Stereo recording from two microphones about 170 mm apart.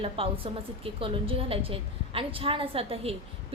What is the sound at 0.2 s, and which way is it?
A woman's voice, 35° right (ahead or behind).